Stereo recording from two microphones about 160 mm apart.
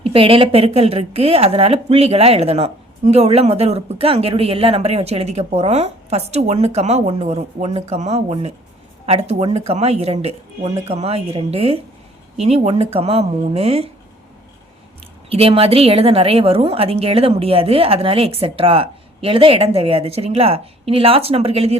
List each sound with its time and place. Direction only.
0.0 s speech: 35° right (ahead or behind)
15.3 s speech: 35° right (ahead or behind)